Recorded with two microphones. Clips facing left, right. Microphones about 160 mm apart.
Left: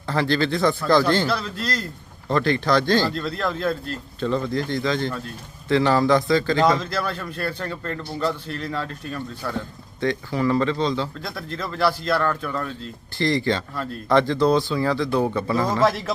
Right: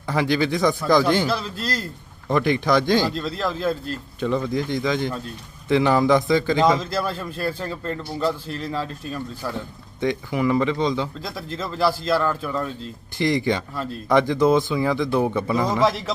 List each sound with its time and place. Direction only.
0.1 s speech: 15° right (ahead or behind)
3.2 s speech: 5° right (ahead or behind)
4.2 s a man's voice: 15° right (ahead or behind)
7.9 s speech: 5° right (ahead or behind)
11.9 s speech: 5° right (ahead or behind)
13.1 s speech: 20° right (ahead or behind)
15.8 s speech: centre (ahead or behind)